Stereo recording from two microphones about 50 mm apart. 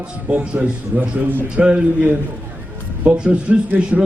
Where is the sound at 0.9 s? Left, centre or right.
Right.